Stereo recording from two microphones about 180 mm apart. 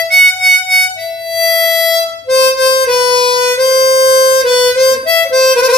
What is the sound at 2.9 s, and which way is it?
Harmonica, 30° left (ahead or behind).